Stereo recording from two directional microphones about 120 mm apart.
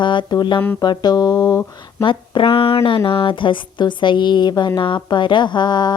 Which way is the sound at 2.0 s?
45° left (ahead or behind).